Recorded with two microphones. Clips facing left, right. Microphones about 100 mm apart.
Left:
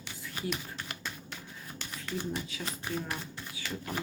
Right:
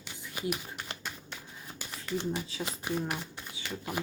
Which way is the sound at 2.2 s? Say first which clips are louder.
Right 2 dB; 30° right (ahead or behind).